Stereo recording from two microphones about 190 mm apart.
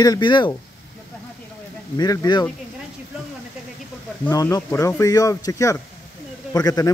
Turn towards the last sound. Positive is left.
turn(degrees=20)  # may be behind; listen again after turning